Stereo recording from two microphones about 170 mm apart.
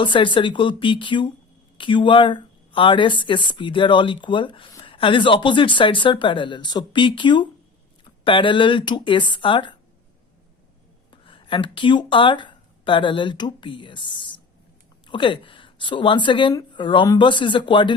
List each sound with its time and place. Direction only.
0.0 s speech: 30° left (ahead or behind)
11.1 s speech: 30° left (ahead or behind)